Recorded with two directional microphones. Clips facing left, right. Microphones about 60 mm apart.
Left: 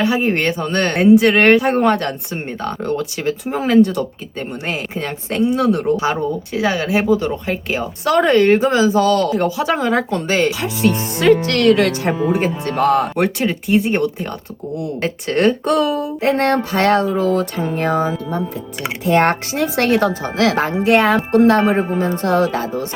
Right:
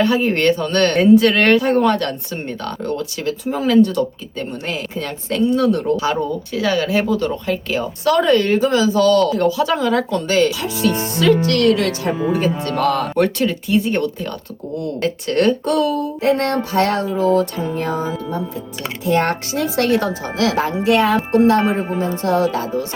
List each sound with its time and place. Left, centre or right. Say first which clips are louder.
0.0 s speech: right 1 dB; centre; by 11.6 s left
11.6 s speech: left 2 dB; left
12.0 s speech: left 1 dB; left